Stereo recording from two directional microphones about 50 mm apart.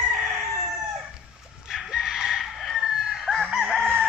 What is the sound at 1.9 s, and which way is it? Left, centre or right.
Chicken, centre.